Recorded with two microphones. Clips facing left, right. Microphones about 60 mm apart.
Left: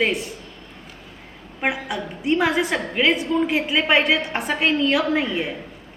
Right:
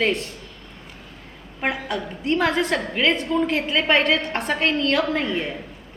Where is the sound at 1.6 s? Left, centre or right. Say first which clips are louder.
Left 1 dB; centre.